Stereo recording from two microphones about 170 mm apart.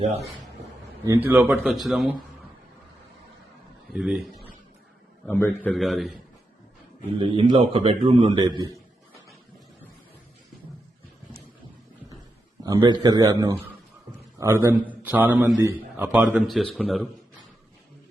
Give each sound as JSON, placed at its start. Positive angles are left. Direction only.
{"t": 1.0, "sound": "speech", "side_deg": -15}
{"t": 3.9, "sound": "a man's voice", "side_deg": 0}
{"t": 5.2, "sound": "a man's voice", "side_deg": 15}
{"t": 5.5, "sound": "a man's voice", "side_deg": 0}
{"t": 7.2, "sound": "a man's voice", "side_deg": -30}
{"t": 8.4, "sound": "a man's voice", "side_deg": -20}
{"t": 12.6, "sound": "a man's voice", "side_deg": -25}